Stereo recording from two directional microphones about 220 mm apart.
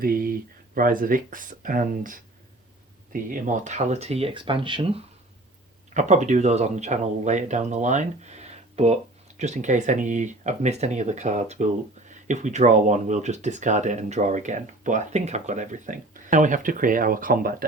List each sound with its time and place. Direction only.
0.0 s speech: 40° right (ahead or behind)